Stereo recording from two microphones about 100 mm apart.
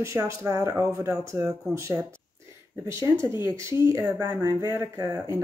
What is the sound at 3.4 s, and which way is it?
Speech, 25° right (ahead or behind).